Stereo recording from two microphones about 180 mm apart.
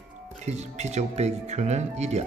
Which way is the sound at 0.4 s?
40° right (ahead or behind).